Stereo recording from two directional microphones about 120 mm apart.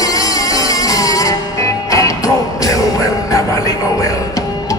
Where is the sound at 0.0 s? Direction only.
30° left (ahead or behind).